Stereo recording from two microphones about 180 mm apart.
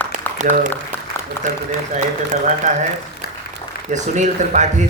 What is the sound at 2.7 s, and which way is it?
Speech, 40° right (ahead or behind).